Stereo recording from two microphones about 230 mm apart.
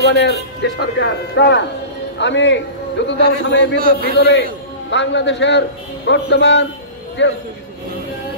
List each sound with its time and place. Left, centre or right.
0.0 s speech: left